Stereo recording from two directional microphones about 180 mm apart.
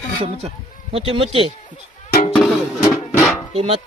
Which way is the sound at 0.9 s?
30° right (ahead or behind).